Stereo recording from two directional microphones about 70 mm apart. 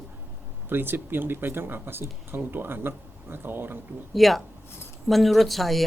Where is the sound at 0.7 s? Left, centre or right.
Right.